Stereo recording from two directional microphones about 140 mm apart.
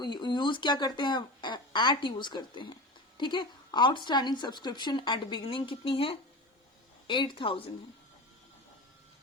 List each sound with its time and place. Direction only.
0.0 s a woman's voice: 30° left (ahead or behind)